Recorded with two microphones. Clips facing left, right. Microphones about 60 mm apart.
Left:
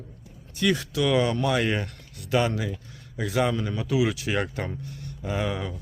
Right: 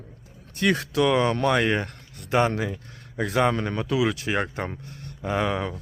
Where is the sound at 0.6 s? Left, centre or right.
Right.